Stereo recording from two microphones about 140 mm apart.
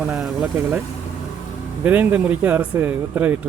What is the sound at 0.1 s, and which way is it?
Speech, 10° right (ahead or behind).